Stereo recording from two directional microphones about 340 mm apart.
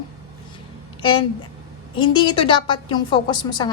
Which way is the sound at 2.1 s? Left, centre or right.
Centre.